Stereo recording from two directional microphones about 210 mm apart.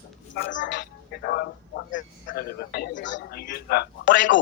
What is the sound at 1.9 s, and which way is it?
A man's voice, 40° left (ahead or behind).